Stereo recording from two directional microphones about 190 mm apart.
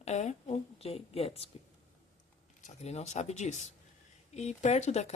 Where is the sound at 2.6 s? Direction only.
35° left (ahead or behind).